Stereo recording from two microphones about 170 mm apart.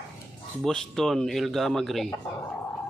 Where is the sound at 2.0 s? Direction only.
15° left (ahead or behind).